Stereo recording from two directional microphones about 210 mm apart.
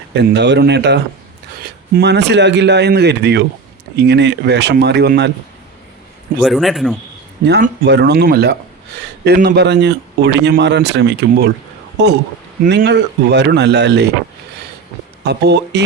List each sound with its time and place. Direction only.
0.1 s a man's voice: 55° right (ahead or behind)
6.4 s speech: centre (ahead or behind)
7.4 s a man's voice: 55° right (ahead or behind)
15.2 s speech: 55° right (ahead or behind)